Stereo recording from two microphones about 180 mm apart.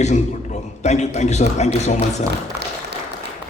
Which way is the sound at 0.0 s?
40° left (ahead or behind).